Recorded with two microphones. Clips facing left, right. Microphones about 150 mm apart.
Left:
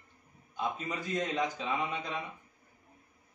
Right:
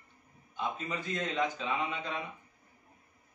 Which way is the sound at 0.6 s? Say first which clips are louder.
Left 1 dB; 10° left (ahead or behind).